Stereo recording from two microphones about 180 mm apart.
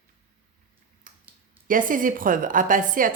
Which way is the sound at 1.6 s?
50° right (ahead or behind).